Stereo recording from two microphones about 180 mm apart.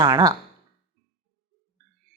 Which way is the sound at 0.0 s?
20° right (ahead or behind).